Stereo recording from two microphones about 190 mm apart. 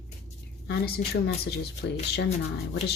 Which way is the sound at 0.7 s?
55° left (ahead or behind).